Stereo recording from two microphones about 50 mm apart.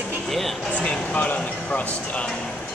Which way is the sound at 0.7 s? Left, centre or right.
Left.